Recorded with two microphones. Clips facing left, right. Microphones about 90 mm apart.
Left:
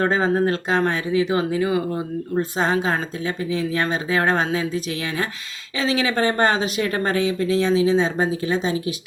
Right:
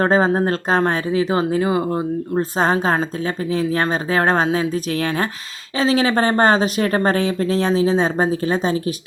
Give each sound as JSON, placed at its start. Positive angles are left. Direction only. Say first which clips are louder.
{"t": 0.0, "sound": "speech", "louder": "right 3 dB", "side_deg": -40}
{"t": 2.6, "sound": "speech", "louder": "right 4 dB", "side_deg": -40}